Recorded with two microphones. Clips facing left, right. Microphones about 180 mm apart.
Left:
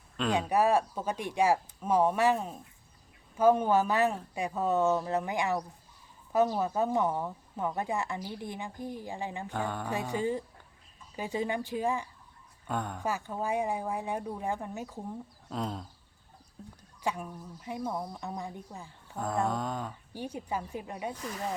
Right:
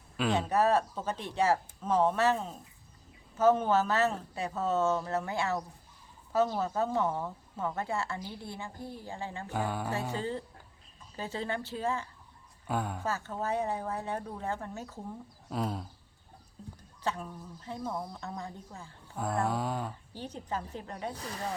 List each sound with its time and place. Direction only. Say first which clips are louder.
0.3 s a woman's voice: left 1 dB; 10° left (ahead or behind)
9.5 s mantra: right 3 dB; 10° right (ahead or behind)
9.9 s a woman's voice: left 3 dB; 15° left (ahead or behind)
12.6 s a sound: right 1 dB; 5° right (ahead or behind)
13.0 s a woman's voice: left 1 dB; 15° left (ahead or behind)
15.4 s speech: right 2 dB; 5° right (ahead or behind)
17.0 s a woman's voice: left 1 dB; 10° left (ahead or behind)
19.5 s a sound: even; 5° right (ahead or behind)
20.1 s a woman's voice: left 3 dB; 10° left (ahead or behind)